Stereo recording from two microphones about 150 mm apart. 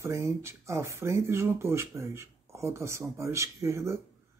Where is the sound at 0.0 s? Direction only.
20° right (ahead or behind).